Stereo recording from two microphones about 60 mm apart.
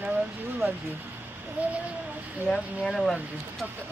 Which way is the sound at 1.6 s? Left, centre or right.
Right.